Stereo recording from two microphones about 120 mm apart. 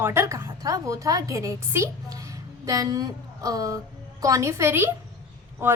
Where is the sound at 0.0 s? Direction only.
20° right (ahead or behind).